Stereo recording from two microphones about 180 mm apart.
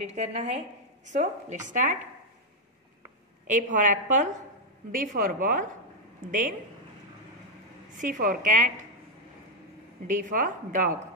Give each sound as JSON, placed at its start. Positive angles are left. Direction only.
{"t": 0.0, "sound": "a woman's voice", "side_deg": -40}
{"t": 3.4, "sound": "a woman's voice", "side_deg": -45}
{"t": 7.9, "sound": "a woman's voice", "side_deg": -45}
{"t": 10.0, "sound": "a woman's voice", "side_deg": -45}